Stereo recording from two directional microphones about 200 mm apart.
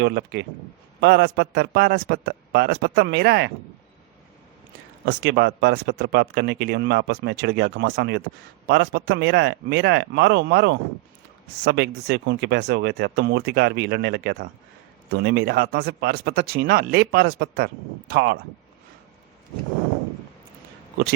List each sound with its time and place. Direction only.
0.0 s speech: 60° right (ahead or behind)
5.0 s speech: 60° right (ahead or behind)